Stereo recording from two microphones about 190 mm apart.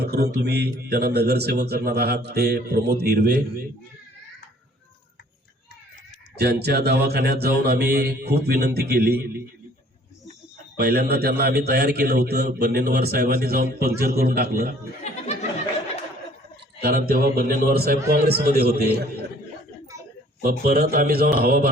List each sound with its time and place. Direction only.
0.0 s a man's voice: 55° right (ahead or behind)
6.4 s a man's voice: 60° right (ahead or behind)
10.8 s a man's voice: 55° right (ahead or behind)
16.8 s a man's voice: 50° right (ahead or behind)
20.4 s a man's voice: 50° right (ahead or behind)